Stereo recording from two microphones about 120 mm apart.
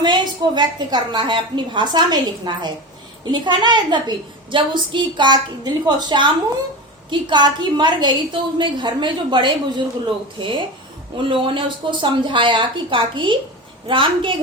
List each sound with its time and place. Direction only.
0.0 s a woman's voice: 40° right (ahead or behind)
11.2 s a woman's voice: 45° right (ahead or behind)